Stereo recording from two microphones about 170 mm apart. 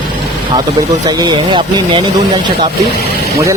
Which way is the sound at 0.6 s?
25° right (ahead or behind).